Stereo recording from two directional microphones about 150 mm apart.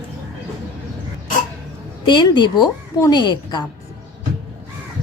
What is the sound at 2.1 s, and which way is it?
A woman's voice, 30° left (ahead or behind).